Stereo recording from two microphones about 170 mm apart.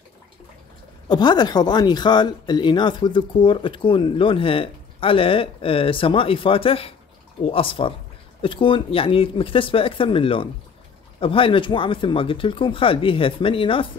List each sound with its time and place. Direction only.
1.0 s speech: 25° left (ahead or behind)